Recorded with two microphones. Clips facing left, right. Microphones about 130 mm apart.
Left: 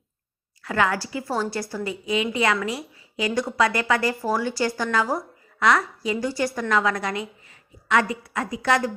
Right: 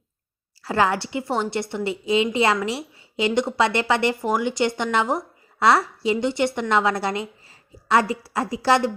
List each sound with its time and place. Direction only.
0.6 s a woman's voice: 30° right (ahead or behind)